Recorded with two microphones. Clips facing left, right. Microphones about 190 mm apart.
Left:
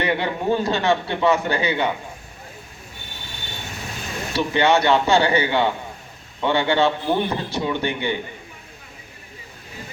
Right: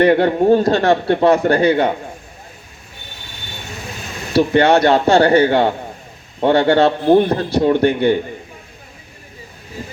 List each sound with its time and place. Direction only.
0.0 s a man's voice: 60° right (ahead or behind)
4.4 s a man's voice: 60° right (ahead or behind)